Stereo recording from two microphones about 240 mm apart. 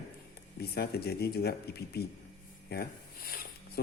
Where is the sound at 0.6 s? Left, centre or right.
Left.